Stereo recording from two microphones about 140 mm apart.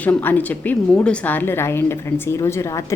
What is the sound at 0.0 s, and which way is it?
A woman's voice, 10° left (ahead or behind).